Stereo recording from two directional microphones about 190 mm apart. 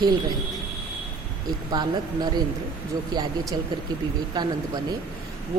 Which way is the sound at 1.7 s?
20° right (ahead or behind).